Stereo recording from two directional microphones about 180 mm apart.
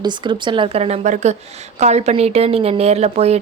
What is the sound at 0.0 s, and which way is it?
A woman's voice, 25° right (ahead or behind).